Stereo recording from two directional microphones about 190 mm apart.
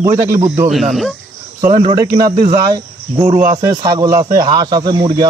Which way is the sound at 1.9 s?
20° right (ahead or behind).